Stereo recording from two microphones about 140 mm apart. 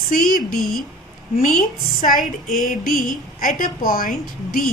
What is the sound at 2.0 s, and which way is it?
Speech, 75° left (ahead or behind).